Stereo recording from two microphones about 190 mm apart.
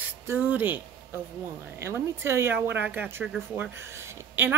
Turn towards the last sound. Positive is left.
turn(degrees=-15)  # may be behind; listen again after turning